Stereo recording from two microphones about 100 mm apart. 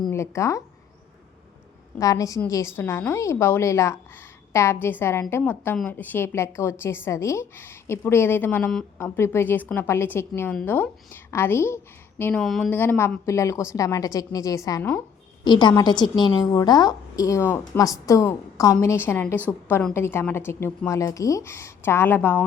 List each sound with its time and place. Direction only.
0.1 s speech: 30° left (ahead or behind)
2.0 s a woman's voice: 35° left (ahead or behind)
12.4 s speech: 5° left (ahead or behind)
12.7 s a woman's voice: 20° left (ahead or behind)
13.2 s a woman's voice: 30° left (ahead or behind)
15.4 s a woman's voice: 50° left (ahead or behind); by 22.4 s 20° left (ahead or behind)